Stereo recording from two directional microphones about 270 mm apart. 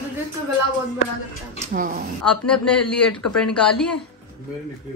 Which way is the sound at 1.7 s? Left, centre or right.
Right.